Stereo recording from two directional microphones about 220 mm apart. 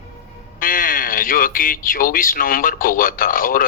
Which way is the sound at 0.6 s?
40° left (ahead or behind).